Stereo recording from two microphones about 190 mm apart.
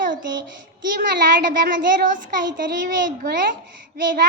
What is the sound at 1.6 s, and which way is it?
Speech, 45° right (ahead or behind).